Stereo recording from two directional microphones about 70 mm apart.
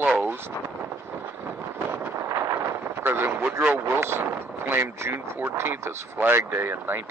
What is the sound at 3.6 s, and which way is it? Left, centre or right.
Speech, right.